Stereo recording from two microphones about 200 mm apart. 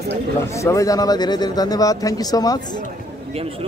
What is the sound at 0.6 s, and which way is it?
Speech, 15° left (ahead or behind).